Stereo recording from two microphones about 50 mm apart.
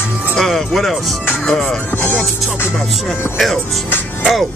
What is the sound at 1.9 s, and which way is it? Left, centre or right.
Music, left.